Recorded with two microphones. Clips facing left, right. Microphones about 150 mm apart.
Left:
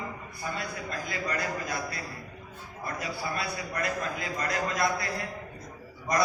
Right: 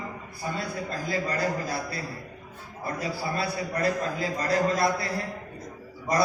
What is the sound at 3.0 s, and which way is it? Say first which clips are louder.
A man's voice: right 4 dB; 30° right (ahead or behind).